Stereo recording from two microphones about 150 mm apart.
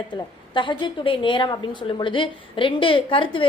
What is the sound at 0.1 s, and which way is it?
A woman's voice, 35° left (ahead or behind).